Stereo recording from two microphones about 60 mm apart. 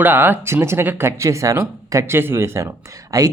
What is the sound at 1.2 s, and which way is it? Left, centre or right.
Speech, right.